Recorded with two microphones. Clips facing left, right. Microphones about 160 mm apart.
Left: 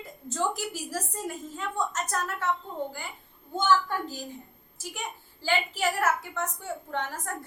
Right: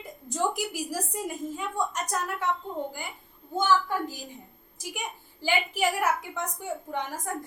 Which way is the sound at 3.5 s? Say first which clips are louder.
Even; 10° right (ahead or behind).